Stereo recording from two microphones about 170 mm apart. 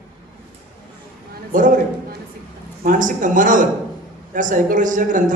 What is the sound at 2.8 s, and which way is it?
A man's voice, 50° right (ahead or behind).